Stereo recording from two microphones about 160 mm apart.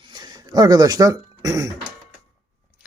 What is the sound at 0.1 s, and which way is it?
Speech, 25° right (ahead or behind).